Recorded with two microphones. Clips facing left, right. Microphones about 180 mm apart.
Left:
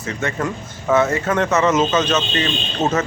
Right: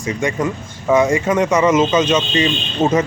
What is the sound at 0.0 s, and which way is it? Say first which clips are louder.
Speech: right 4 dB; 10° right (ahead or behind).